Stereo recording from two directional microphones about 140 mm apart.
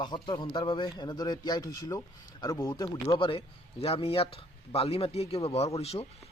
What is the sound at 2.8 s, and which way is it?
A man's voice, 35° left (ahead or behind).